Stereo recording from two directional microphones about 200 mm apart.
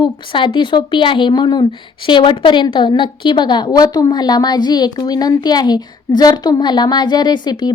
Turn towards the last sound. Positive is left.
turn(degrees=20)  # may be behind; listen again after turning